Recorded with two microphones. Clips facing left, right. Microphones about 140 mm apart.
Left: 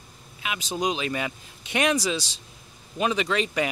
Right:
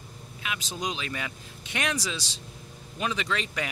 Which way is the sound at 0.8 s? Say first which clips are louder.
Left 6 dB; 10° left (ahead or behind).